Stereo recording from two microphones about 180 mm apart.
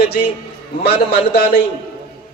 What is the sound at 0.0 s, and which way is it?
A man's voice, 70° left (ahead or behind).